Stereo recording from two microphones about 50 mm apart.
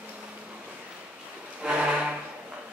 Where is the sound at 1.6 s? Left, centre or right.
Right.